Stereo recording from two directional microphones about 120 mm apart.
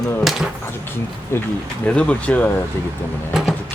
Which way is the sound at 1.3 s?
20° left (ahead or behind).